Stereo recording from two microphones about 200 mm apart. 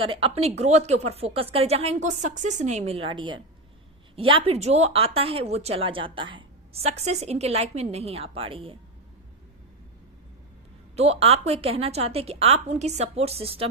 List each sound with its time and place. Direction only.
0.0 s a woman's voice: 25° right (ahead or behind)
10.9 s speech: 30° right (ahead or behind)